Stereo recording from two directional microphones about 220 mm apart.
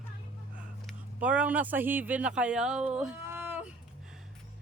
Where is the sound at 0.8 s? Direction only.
5° right (ahead or behind).